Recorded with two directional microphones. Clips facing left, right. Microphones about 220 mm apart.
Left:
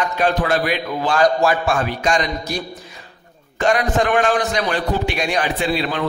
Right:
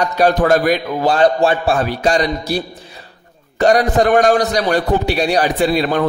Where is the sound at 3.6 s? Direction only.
35° right (ahead or behind).